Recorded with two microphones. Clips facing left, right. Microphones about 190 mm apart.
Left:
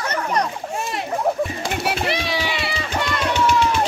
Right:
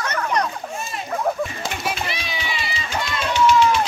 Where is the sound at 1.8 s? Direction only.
70° left (ahead or behind).